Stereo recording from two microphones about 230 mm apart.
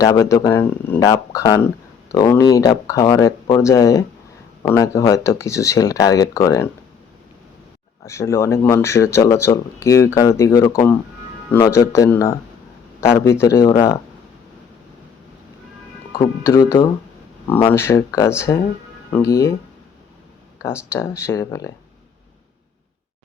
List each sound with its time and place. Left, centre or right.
0.0 s speech: centre
8.0 s speech: centre
16.2 s speech: centre
20.9 s speech: centre